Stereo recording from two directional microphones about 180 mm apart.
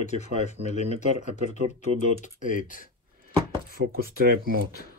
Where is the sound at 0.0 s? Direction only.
40° left (ahead or behind).